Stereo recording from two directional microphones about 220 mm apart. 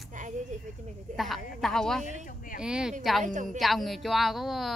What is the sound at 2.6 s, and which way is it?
A woman's voice, 5° right (ahead or behind).